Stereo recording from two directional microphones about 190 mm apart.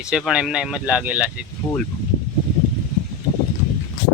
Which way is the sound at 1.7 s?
15° left (ahead or behind).